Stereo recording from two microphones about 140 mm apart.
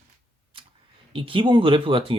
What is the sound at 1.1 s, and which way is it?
Speech, 40° right (ahead or behind).